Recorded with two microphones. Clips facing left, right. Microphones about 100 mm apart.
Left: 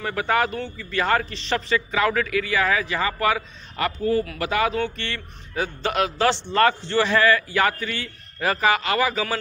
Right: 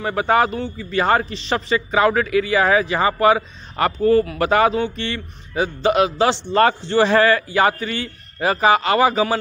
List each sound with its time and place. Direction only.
0.0 s a man's voice: 25° right (ahead or behind)
4.7 s a man's voice: 20° right (ahead or behind)